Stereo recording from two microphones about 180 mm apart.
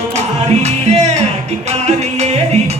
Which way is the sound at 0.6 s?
40° right (ahead or behind).